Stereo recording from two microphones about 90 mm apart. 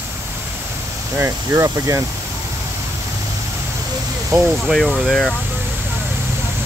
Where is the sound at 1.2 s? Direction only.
35° right (ahead or behind).